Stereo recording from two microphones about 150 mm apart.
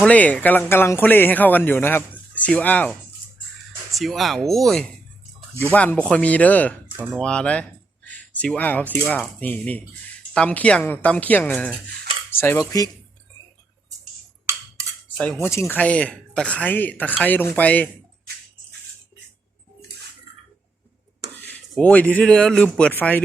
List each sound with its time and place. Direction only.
0.0 s speech: 10° left (ahead or behind)
3.9 s speech: centre (ahead or behind); by 12.9 s 20° left (ahead or behind)
15.2 s speech: 10° left (ahead or behind)
21.3 s speech: 10° left (ahead or behind)